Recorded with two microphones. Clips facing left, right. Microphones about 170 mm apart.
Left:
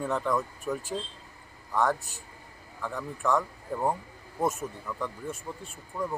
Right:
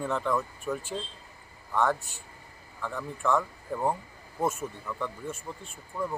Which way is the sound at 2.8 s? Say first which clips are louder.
Even; centre (ahead or behind).